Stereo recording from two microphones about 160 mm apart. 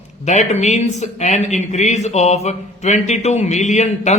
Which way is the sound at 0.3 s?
45° left (ahead or behind).